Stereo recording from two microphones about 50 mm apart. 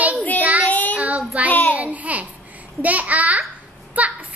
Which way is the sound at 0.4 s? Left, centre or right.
Right.